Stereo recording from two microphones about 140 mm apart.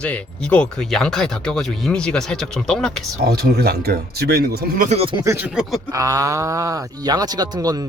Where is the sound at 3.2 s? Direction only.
90° right.